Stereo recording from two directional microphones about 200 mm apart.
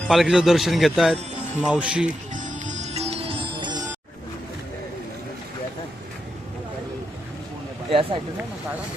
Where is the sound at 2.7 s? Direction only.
35° right (ahead or behind).